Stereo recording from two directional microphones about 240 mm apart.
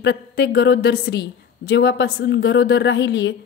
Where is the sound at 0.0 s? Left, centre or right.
Left.